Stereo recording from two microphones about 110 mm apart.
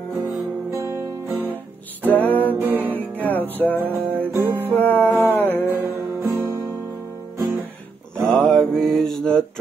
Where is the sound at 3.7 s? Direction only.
15° right (ahead or behind).